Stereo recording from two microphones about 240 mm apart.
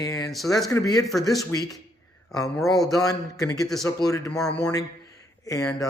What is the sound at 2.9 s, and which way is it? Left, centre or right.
Speech, centre.